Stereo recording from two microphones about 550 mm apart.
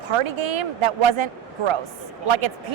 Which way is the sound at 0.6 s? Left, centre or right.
Right.